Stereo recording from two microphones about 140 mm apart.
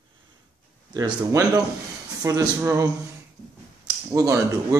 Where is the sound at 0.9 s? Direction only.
25° right (ahead or behind).